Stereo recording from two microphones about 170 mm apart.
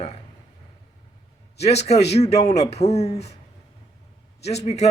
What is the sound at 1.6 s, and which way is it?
A man's voice, 40° left (ahead or behind).